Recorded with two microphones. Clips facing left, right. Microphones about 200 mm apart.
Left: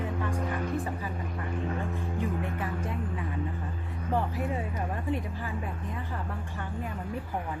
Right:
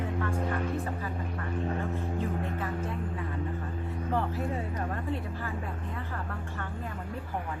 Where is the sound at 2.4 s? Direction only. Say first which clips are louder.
Even; 15° left (ahead or behind).